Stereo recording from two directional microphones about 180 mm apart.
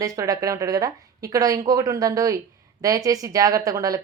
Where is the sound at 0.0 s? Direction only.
20° right (ahead or behind).